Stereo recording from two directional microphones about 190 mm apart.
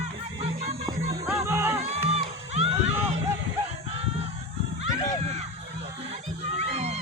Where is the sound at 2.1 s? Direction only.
35° right (ahead or behind).